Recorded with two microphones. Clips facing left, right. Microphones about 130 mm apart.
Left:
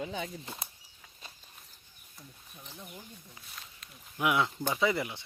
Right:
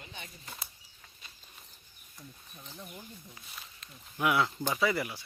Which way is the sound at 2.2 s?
Centre (ahead or behind).